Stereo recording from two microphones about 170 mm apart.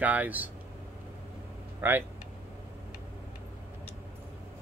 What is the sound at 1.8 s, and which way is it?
Speech, 10° right (ahead or behind).